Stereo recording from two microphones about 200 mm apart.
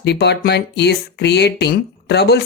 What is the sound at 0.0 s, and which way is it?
Speech, 55° left (ahead or behind).